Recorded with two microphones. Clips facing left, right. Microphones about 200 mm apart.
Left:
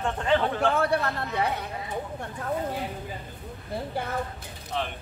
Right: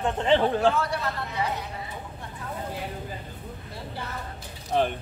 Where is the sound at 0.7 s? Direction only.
55° left (ahead or behind).